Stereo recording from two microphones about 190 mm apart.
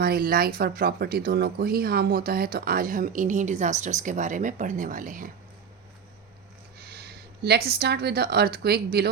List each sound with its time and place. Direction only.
0.0 s speech: 50° right (ahead or behind)
6.7 s a woman's voice: 55° right (ahead or behind)